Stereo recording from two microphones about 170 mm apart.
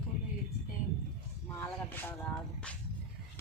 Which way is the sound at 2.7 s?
5° left (ahead or behind).